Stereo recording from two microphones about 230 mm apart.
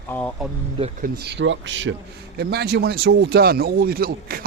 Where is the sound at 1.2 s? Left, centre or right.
Right.